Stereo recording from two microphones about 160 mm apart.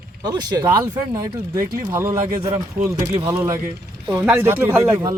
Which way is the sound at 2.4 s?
40° right (ahead or behind).